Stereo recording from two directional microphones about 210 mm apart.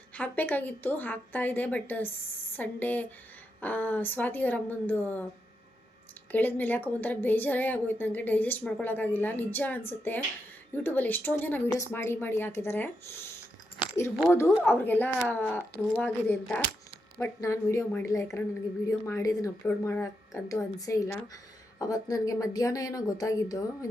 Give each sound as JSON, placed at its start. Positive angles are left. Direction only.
{"t": 0.1, "sound": "a woman's voice", "side_deg": 10}
{"t": 6.3, "sound": "a woman's voice", "side_deg": 10}
{"t": 14.3, "sound": "a woman's voice", "side_deg": 10}